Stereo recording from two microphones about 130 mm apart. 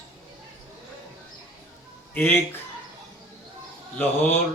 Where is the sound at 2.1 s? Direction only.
15° left (ahead or behind).